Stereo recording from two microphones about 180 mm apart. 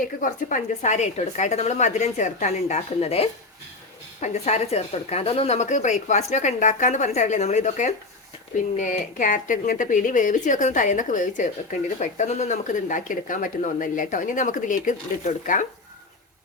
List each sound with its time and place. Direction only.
0.0 s a woman's voice: 45° left (ahead or behind)